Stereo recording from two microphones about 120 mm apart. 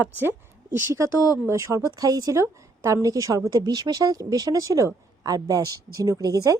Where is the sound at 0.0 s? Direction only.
15° right (ahead or behind).